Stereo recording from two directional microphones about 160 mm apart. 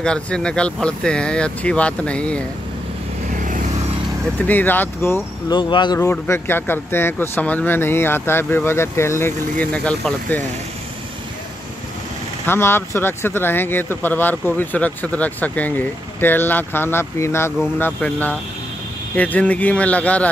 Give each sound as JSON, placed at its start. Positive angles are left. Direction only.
{"t": 0.0, "sound": "speech", "side_deg": 5}
{"t": 3.3, "sound": "vehicle", "side_deg": -55}
{"t": 4.5, "sound": "speech", "side_deg": 10}
{"t": 5.5, "sound": "speech", "side_deg": 30}
{"t": 5.9, "sound": "speech", "side_deg": 15}
{"t": 12.4, "sound": "speech", "side_deg": 15}